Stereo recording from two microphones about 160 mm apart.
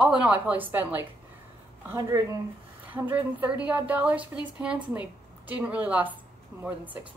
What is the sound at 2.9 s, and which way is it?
A woman's voice, 10° right (ahead or behind).